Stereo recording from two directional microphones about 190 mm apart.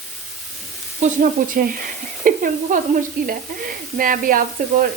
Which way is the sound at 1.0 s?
40° right (ahead or behind).